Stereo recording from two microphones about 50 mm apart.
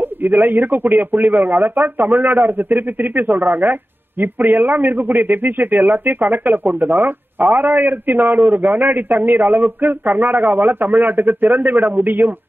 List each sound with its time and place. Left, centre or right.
0.0 s speech: right